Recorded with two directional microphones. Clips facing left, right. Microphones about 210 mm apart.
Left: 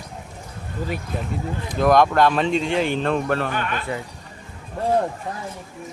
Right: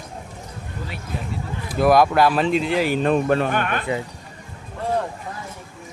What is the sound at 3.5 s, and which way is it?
Speech, 50° right (ahead or behind).